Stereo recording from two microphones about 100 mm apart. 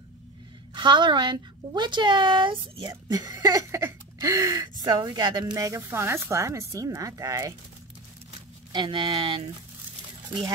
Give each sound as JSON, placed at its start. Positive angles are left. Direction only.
{"t": 0.7, "sound": "a woman's voice", "side_deg": -50}
{"t": 8.7, "sound": "speech", "side_deg": -55}